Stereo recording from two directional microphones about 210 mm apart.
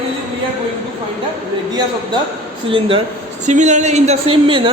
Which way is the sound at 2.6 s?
25° right (ahead or behind).